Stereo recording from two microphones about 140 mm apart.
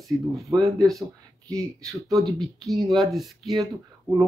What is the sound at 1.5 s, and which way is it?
Speech, 5° left (ahead or behind).